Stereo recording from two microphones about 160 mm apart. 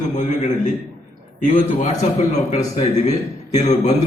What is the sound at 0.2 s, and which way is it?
A man's voice, 50° left (ahead or behind).